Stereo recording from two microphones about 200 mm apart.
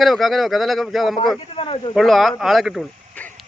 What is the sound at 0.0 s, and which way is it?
Speech, centre (ahead or behind).